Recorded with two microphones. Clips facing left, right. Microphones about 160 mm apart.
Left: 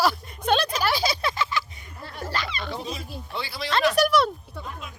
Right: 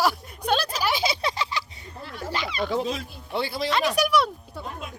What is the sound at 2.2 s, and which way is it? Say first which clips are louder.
Speech: right 3 dB; 20° right (ahead or behind).